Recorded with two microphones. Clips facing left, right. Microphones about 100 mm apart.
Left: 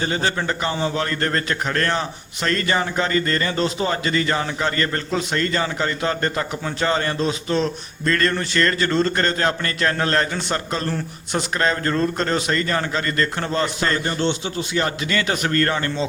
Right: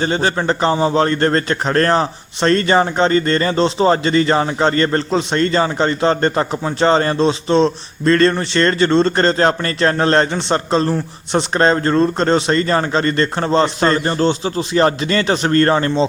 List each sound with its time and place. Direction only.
0.0 s a man's voice: 30° right (ahead or behind)